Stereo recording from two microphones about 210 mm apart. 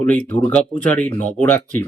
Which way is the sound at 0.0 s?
10° left (ahead or behind).